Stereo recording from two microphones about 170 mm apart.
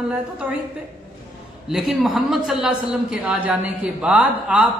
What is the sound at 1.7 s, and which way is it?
A man's voice, centre (ahead or behind).